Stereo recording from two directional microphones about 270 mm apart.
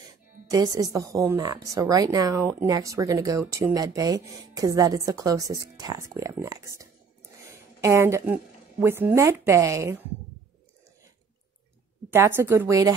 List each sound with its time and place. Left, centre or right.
0.5 s a woman's voice: centre
12.1 s a woman's voice: centre